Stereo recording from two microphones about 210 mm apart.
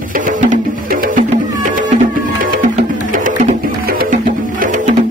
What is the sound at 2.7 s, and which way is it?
Music, 35° right (ahead or behind).